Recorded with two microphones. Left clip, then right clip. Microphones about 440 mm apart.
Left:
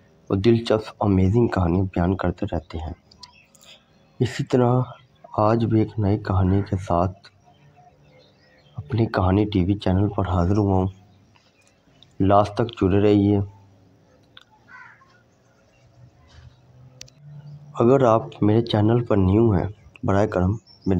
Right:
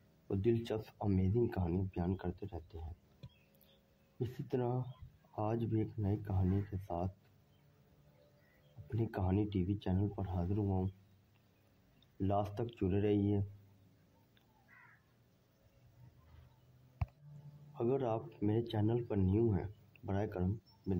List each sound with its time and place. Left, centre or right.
0.3 s speech: right
4.2 s speech: right
8.8 s speech: right
12.2 s speech: right
17.7 s speech: right